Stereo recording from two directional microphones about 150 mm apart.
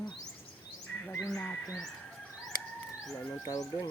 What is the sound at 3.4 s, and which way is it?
Speech, 25° left (ahead or behind).